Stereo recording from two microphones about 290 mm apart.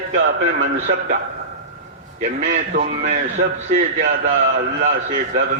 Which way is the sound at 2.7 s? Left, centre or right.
Right.